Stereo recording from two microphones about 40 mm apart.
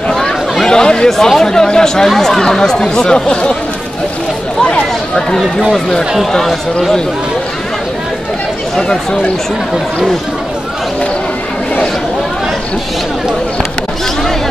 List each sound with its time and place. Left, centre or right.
0.7 s speech: centre
4.6 s a sound: left
6.3 s speech: centre
8.7 s speech: centre